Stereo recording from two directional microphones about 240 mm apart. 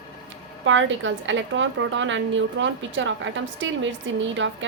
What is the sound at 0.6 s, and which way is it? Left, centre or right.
A woman's voice, right.